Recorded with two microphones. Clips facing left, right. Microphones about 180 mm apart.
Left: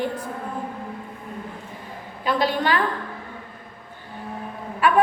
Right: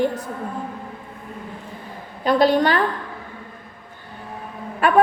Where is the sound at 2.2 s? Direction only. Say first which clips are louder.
Right 6 dB; 40° right (ahead or behind).